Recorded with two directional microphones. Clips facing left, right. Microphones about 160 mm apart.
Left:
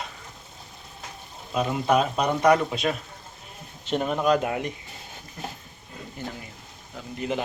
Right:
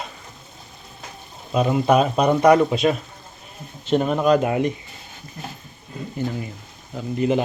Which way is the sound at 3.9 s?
5° left (ahead or behind).